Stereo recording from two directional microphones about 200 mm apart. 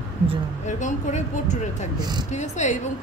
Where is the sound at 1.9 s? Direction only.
20° right (ahead or behind).